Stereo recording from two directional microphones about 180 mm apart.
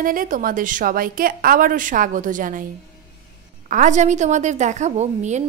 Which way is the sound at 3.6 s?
45° right (ahead or behind).